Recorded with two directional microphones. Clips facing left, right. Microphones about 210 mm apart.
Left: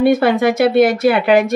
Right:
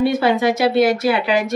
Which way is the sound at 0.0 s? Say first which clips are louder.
Left 4 dB; 55° left (ahead or behind).